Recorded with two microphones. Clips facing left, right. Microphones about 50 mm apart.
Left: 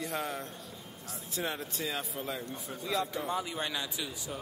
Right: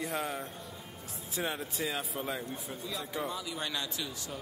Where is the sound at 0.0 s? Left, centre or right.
Centre.